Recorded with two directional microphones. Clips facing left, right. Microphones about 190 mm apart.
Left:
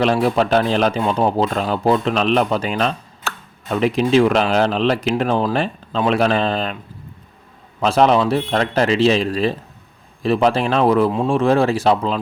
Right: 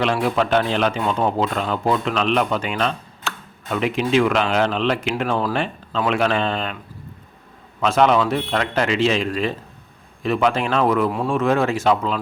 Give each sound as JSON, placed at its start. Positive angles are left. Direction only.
{"t": 0.0, "sound": "speech", "side_deg": 35}
{"t": 7.8, "sound": "speech", "side_deg": 35}